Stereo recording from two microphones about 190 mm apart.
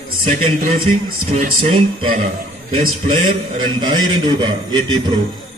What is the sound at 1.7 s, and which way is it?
A man's voice, 30° right (ahead or behind).